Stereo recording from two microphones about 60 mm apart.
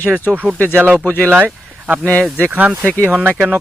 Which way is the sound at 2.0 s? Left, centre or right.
Left.